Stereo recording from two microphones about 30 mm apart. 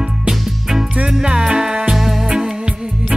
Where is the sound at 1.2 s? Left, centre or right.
Right.